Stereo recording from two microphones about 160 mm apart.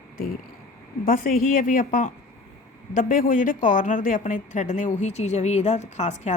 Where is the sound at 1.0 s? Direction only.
60° left (ahead or behind).